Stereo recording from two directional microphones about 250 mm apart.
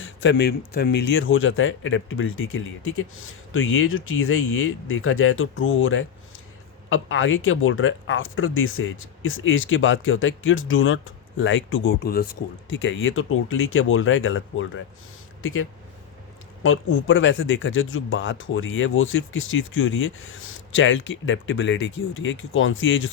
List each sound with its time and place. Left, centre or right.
0.0 s speech: left
16.6 s speech: left